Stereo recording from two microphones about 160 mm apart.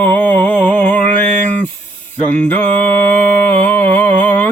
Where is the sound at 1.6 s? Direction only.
10° left (ahead or behind).